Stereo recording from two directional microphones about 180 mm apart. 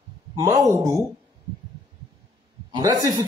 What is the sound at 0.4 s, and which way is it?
Speech, 20° right (ahead or behind).